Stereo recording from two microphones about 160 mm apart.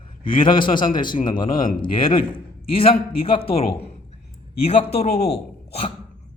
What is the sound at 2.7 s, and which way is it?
Speech, 35° left (ahead or behind).